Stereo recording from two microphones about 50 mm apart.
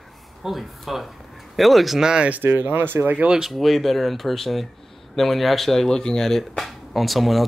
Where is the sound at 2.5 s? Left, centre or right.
Right.